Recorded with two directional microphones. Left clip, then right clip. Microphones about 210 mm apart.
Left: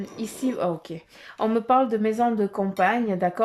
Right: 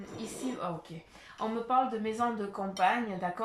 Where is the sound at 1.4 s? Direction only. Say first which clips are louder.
Left 8 dB; 45° left (ahead or behind).